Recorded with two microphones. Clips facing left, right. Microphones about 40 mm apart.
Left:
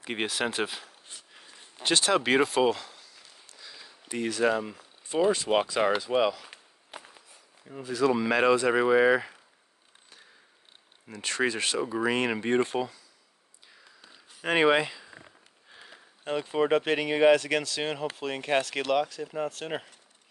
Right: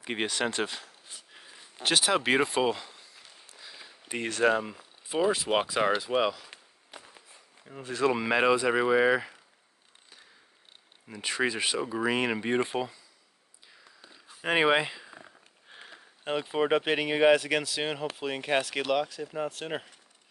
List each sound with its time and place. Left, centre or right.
0.0 s speech: centre
1.3 s a sound: centre
4.2 s speech: right
4.6 s a sound: centre
5.2 s speech: centre
7.8 s speech: right
8.1 s speech: centre
11.1 s speech: centre
14.4 s speech: centre
15.7 s a sound: right
16.3 s speech: centre